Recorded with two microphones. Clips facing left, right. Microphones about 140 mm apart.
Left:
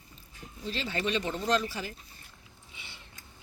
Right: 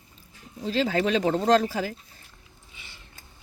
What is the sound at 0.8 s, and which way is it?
Speech, 90° right.